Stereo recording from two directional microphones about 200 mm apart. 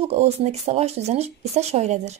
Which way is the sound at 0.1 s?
30° right (ahead or behind).